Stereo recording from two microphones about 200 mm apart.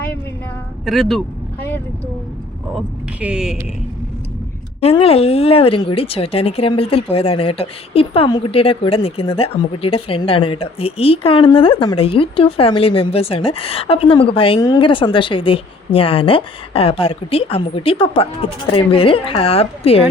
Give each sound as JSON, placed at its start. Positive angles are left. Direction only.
{"t": 0.9, "sound": "speech", "side_deg": 0}
{"t": 2.7, "sound": "speech", "side_deg": -5}
{"t": 4.8, "sound": "speech", "side_deg": 30}